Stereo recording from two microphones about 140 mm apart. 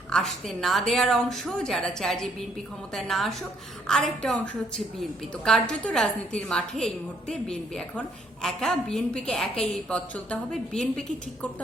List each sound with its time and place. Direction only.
0.1 s a woman's voice: centre (ahead or behind)